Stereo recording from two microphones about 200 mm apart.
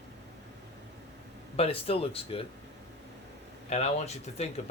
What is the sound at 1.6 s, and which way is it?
Speech, 30° left (ahead or behind).